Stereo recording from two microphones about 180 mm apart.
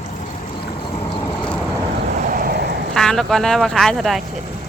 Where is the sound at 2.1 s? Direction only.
50° right (ahead or behind).